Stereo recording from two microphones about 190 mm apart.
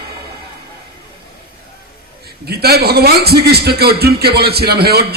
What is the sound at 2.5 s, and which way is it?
A man's voice, 55° right (ahead or behind).